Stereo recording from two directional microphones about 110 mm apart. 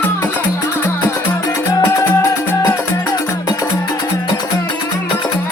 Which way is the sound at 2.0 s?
25° left (ahead or behind).